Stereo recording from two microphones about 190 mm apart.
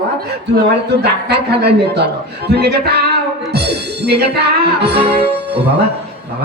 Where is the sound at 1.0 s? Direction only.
60° right (ahead or behind).